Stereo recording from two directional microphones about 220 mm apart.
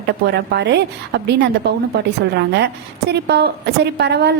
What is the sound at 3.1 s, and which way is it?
A woman's voice, 50° right (ahead or behind).